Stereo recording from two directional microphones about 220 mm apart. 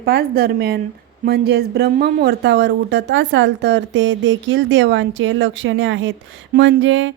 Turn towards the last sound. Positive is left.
turn(degrees=-60)  # may be behind; listen again after turning